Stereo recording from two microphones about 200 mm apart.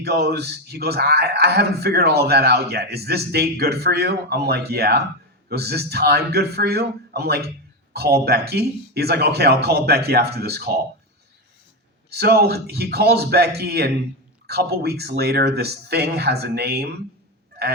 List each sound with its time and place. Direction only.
0.0 s a man's voice: 55° right (ahead or behind)
12.1 s a man's voice: 50° right (ahead or behind)